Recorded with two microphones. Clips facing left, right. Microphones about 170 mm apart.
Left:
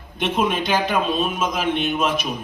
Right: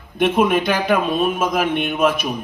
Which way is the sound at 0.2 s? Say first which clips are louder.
Right 5 dB; 55° right (ahead or behind).